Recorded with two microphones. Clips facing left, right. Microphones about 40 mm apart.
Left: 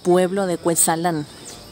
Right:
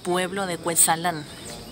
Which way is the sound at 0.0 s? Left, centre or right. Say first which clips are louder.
Left 8 dB; right.